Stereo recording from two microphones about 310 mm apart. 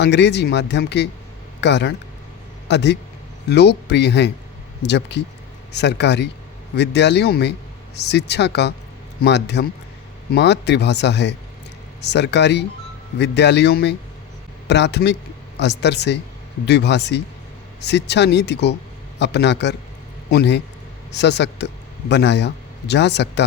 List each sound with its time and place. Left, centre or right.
0.0 s speech: left